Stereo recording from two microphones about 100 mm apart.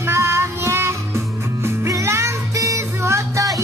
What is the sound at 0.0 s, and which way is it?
Music, 25° right (ahead or behind).